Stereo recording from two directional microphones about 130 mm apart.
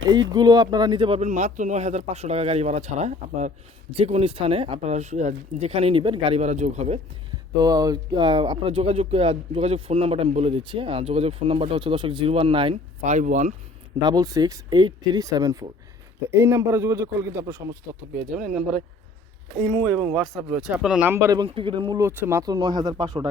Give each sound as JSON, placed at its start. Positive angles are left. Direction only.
{"t": 0.1, "sound": "speech", "side_deg": -30}
{"t": 1.2, "sound": "speech", "side_deg": -60}
{"t": 3.9, "sound": "speech", "side_deg": -50}
{"t": 6.4, "sound": "speech", "side_deg": -60}
{"t": 7.6, "sound": "speech", "side_deg": -30}
{"t": 13.1, "sound": "speech", "side_deg": -70}
{"t": 14.0, "sound": "speech", "side_deg": -30}
{"t": 16.3, "sound": "a man's voice", "side_deg": -20}
{"t": 18.1, "sound": "speech", "side_deg": -5}
{"t": 19.6, "sound": "speech", "side_deg": 10}
{"t": 21.1, "sound": "a man's voice", "side_deg": -20}
{"t": 21.3, "sound": "speech", "side_deg": -40}
{"t": 21.9, "sound": "a man's voice", "side_deg": -20}
{"t": 22.4, "sound": "speech", "side_deg": -30}